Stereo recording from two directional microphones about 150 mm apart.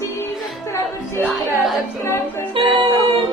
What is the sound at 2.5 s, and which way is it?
Music, 35° right (ahead or behind).